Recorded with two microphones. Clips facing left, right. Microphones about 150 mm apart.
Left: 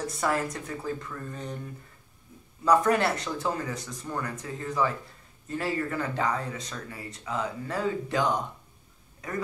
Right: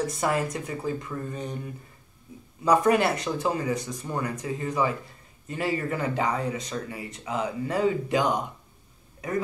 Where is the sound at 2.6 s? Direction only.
15° right (ahead or behind).